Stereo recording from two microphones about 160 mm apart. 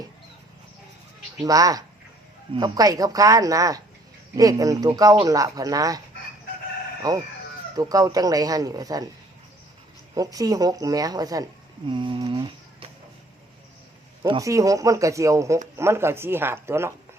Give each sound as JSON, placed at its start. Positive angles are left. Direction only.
{"t": 1.4, "sound": "speech", "side_deg": -20}
{"t": 7.0, "sound": "speech", "side_deg": -20}
{"t": 10.2, "sound": "speech", "side_deg": -20}
{"t": 11.9, "sound": "a sound", "side_deg": -30}
{"t": 14.3, "sound": "speech", "side_deg": -20}